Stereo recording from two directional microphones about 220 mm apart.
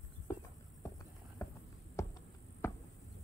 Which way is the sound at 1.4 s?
15° left (ahead or behind).